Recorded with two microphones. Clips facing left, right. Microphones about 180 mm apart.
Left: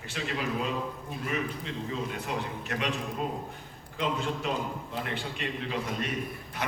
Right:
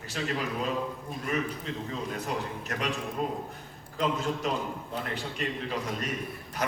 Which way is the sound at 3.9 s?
40° right (ahead or behind).